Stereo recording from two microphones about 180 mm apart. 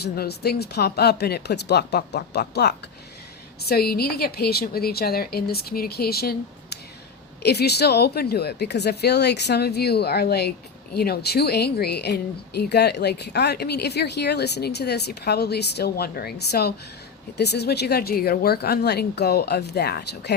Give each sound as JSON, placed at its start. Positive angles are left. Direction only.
{"t": 0.0, "sound": "a woman's voice", "side_deg": 65}